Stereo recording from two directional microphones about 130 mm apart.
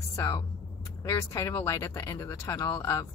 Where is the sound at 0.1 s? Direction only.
20° left (ahead or behind).